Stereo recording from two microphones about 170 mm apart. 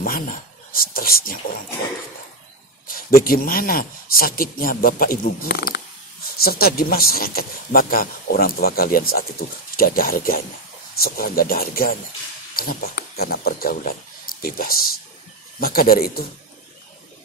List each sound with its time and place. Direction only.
0.0 s speech: 60° left (ahead or behind)
2.9 s speech: 60° left (ahead or behind)